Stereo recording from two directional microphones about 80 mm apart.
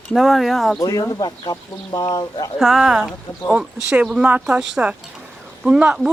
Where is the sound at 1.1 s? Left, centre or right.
Left.